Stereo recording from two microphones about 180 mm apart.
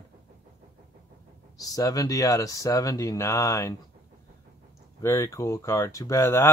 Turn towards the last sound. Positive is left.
turn(degrees=15)  # may be behind; listen again after turning